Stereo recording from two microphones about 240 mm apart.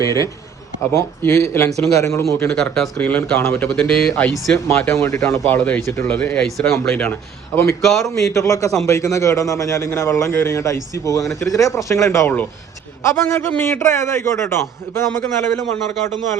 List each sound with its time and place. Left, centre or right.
0.0 s speech: centre
8.1 s speech: centre